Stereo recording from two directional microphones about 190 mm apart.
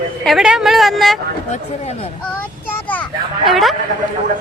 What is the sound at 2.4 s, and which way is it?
A child's voice, 10° left (ahead or behind).